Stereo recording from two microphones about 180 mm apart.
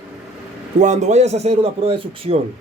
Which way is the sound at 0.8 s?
40° right (ahead or behind).